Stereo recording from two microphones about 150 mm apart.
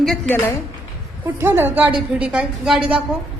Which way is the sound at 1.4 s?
15° right (ahead or behind).